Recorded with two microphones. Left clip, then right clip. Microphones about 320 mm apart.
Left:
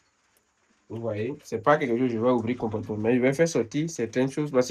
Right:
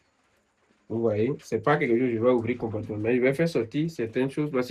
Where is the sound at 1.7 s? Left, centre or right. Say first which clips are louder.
Left 1 dB; centre.